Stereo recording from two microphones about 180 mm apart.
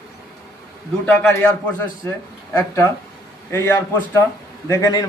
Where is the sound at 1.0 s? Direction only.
5° left (ahead or behind).